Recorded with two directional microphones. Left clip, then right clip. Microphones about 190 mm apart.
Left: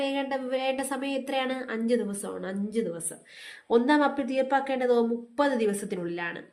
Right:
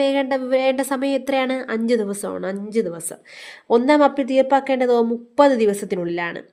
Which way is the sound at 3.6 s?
30° right (ahead or behind).